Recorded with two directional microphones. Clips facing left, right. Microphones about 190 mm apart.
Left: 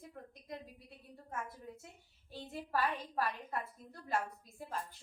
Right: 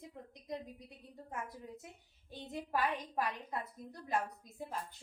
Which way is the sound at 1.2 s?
15° right (ahead or behind).